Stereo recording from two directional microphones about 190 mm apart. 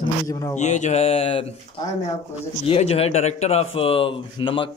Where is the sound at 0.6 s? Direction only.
40° left (ahead or behind).